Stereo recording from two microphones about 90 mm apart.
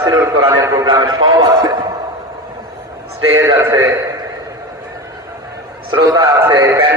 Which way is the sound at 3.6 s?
30° right (ahead or behind).